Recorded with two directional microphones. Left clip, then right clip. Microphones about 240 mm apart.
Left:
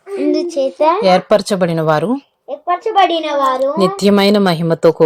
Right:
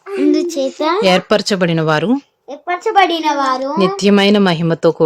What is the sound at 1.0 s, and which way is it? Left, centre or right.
Speech, centre.